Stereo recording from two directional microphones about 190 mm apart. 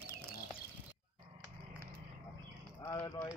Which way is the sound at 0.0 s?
10° right (ahead or behind).